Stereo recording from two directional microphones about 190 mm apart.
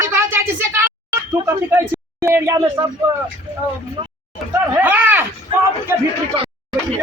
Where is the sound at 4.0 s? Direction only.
25° right (ahead or behind).